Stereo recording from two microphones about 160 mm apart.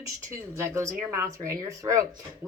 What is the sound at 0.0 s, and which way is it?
Speech, 15° right (ahead or behind).